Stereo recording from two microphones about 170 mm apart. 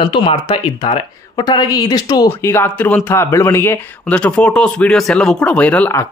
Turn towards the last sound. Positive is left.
turn(degrees=10)  # may be behind; listen again after turning